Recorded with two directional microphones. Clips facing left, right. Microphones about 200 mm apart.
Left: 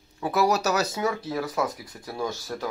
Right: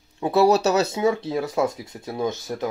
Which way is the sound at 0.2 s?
30° right (ahead or behind).